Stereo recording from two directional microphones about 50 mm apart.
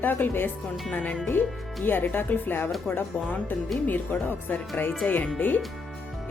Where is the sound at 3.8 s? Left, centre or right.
Left.